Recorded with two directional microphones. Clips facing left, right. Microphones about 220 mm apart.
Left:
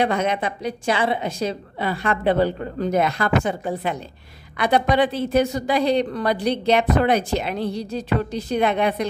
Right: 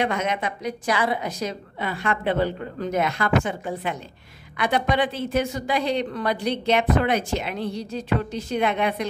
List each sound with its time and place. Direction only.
0.0 s a woman's voice: 35° left (ahead or behind)